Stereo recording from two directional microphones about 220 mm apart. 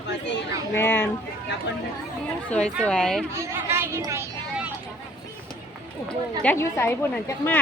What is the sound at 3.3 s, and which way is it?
A child's voice, 10° right (ahead or behind).